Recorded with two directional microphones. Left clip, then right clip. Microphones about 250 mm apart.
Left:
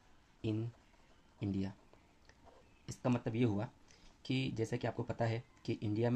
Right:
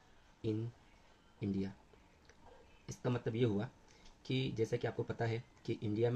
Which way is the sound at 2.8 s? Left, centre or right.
Left.